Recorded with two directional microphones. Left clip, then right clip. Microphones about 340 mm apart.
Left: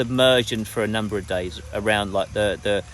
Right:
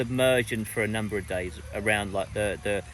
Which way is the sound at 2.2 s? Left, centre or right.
Left.